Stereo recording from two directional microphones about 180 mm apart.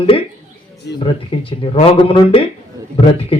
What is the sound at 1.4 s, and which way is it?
A man's voice, 30° left (ahead or behind).